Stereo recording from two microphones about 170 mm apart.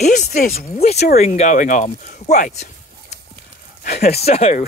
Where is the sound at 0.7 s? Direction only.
40° left (ahead or behind).